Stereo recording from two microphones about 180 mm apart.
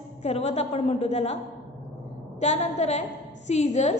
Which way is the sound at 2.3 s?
40° left (ahead or behind).